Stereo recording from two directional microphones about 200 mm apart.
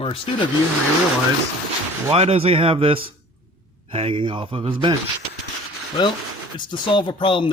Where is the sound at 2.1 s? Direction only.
30° right (ahead or behind).